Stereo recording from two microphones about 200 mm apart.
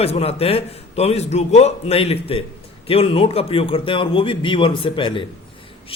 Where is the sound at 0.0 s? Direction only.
30° left (ahead or behind).